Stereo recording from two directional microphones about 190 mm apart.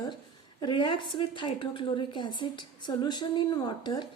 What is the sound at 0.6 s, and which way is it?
A woman's voice, 25° left (ahead or behind).